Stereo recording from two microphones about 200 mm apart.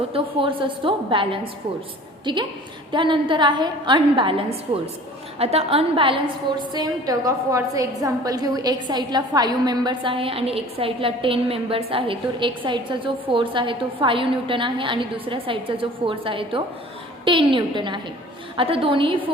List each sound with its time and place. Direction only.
0.1 s a woman's voice: 25° right (ahead or behind)